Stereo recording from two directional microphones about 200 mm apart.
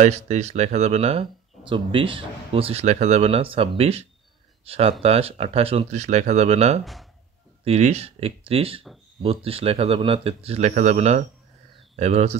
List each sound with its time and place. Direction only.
0.0 s speech: 35° right (ahead or behind)
6.8 s speech: centre (ahead or behind)
7.6 s speech: 30° right (ahead or behind)